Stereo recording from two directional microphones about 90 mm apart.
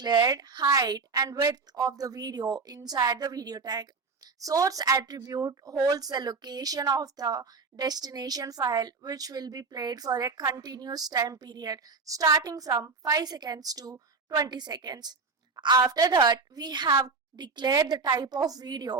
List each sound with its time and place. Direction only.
0.0 s a woman's voice: 50° right (ahead or behind)